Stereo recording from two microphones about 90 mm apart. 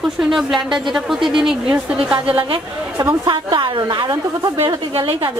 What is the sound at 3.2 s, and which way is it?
A woman's voice, 60° right (ahead or behind).